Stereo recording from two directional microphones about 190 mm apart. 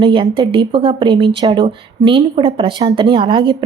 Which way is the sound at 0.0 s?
25° right (ahead or behind).